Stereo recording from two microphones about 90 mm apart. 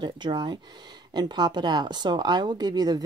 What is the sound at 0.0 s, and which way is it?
Speech, 55° right (ahead or behind).